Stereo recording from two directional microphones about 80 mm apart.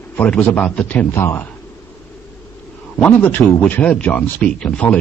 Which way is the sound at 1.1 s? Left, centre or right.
Left.